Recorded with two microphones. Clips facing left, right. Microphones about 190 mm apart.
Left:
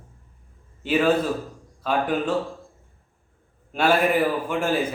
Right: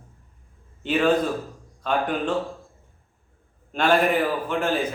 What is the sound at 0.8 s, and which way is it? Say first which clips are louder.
A man's voice: even; 5° left (ahead or behind).